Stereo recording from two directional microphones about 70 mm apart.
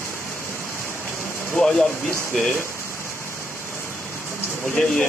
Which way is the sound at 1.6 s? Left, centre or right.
Centre.